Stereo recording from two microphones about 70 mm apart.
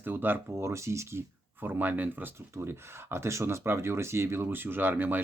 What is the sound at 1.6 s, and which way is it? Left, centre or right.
Speech, right.